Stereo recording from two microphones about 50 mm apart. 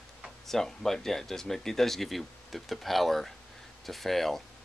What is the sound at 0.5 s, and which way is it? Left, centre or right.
Speech, centre.